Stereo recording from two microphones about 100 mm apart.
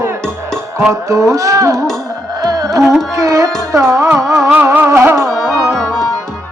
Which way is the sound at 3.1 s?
30° right (ahead or behind).